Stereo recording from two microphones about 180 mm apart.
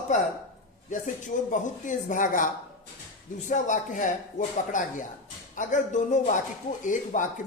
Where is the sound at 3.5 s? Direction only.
45° left (ahead or behind).